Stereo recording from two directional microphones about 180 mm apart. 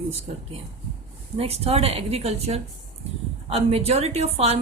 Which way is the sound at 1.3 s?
35° right (ahead or behind).